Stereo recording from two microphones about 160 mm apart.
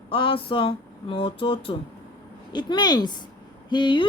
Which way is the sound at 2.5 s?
25° left (ahead or behind).